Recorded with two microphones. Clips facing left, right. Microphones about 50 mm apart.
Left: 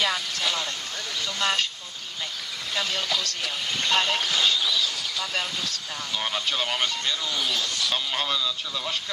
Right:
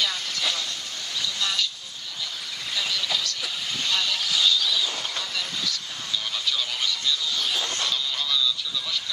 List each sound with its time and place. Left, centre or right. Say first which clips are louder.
1.2 s vehicle: left 2 dB; left
2.7 s speech: left 1 dB; left
7.6 s speech: right 1 dB; right
7.9 s speech: left 1 dB; left